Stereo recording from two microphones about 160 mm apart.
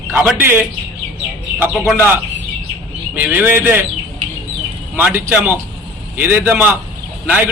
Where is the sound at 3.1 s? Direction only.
10° right (ahead or behind).